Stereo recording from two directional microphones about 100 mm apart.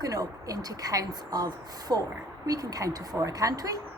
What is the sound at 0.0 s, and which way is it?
Speech, 35° right (ahead or behind).